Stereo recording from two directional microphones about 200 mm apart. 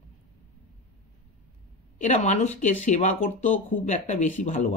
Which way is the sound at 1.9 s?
40° left (ahead or behind).